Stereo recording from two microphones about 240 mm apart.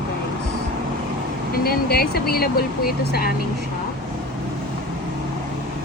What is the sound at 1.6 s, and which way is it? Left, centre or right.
Speech, left.